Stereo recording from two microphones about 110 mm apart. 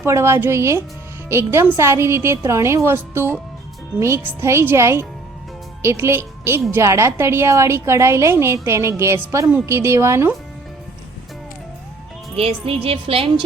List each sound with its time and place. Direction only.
0.0 s a woman's voice: 25° right (ahead or behind)
12.4 s a woman's voice: 60° right (ahead or behind)